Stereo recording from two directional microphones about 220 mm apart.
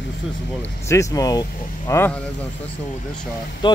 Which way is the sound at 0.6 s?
15° left (ahead or behind).